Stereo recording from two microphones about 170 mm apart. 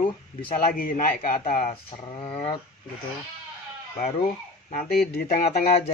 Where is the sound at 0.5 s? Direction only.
60° left (ahead or behind).